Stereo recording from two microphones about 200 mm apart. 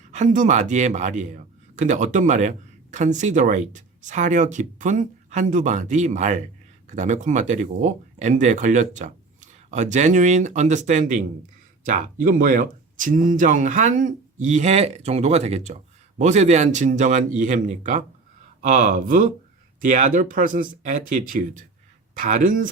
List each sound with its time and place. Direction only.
0.1 s speech: 40° right (ahead or behind)